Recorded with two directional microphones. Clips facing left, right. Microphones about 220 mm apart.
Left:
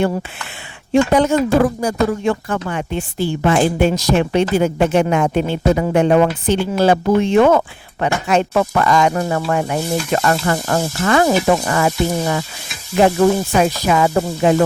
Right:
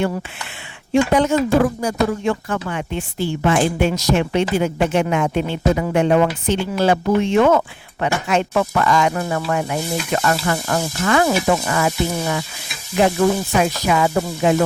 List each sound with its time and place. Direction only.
1.1 s speech: 40° left (ahead or behind)